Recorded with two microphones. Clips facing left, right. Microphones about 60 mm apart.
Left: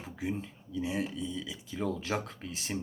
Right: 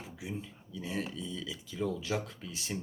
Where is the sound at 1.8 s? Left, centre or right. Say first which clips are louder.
Left 1 dB; left.